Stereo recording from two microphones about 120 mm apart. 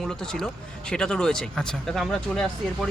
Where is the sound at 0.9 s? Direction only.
5° left (ahead or behind).